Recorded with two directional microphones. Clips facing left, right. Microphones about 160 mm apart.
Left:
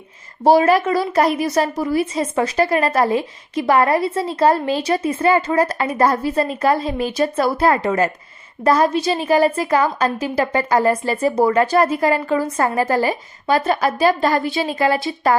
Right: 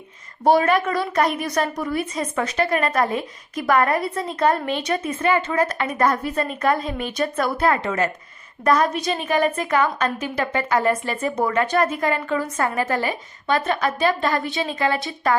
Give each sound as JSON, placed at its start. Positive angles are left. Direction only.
{"t": 0.4, "sound": "a woman's voice", "side_deg": 30}